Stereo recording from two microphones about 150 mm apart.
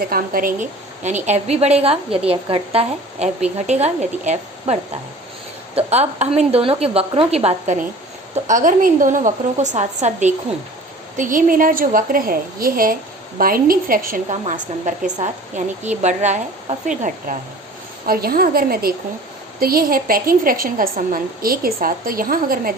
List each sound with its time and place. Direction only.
0.1 s a woman's voice: 70° right (ahead or behind)
1.3 s a woman's voice: 45° right (ahead or behind)
8.4 s a woman's voice: 55° right (ahead or behind)
11.2 s a woman's voice: 65° right (ahead or behind)
14.5 s a woman's voice: 55° right (ahead or behind)
18.0 s a woman's voice: 80° right